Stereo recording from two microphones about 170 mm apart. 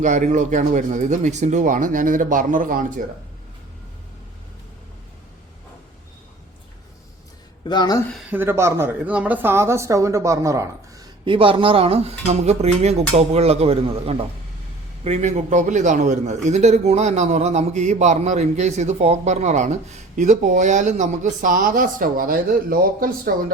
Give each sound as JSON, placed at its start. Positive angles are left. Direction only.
{"t": 0.0, "sound": "speech", "side_deg": -45}
{"t": 7.6, "sound": "speech", "side_deg": 25}
{"t": 8.3, "sound": "speech", "side_deg": -15}